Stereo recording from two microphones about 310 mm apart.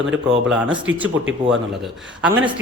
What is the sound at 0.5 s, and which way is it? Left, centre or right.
Speech, centre.